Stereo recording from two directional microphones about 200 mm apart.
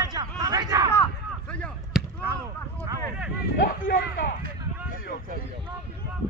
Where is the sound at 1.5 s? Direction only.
5° left (ahead or behind).